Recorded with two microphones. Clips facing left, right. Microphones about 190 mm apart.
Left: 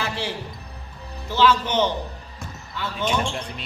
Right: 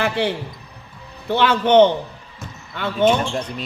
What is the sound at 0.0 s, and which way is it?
A man's voice, 60° right (ahead or behind).